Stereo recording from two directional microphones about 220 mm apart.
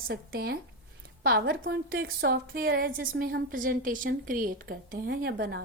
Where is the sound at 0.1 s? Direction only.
45° right (ahead or behind).